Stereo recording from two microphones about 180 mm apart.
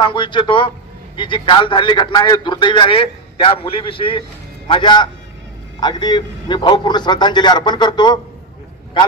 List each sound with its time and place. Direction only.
0.0 s a man's voice: 25° left (ahead or behind)